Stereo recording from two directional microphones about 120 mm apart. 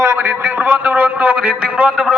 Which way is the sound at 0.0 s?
20° right (ahead or behind).